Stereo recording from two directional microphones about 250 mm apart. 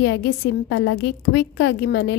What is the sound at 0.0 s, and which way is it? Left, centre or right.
A woman's voice, left.